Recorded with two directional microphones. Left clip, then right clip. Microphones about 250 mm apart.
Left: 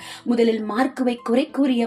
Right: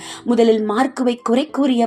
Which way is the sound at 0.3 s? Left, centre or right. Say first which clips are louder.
Right 5 dB; right.